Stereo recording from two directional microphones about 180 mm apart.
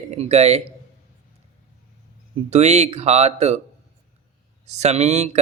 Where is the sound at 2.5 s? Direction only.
40° right (ahead or behind).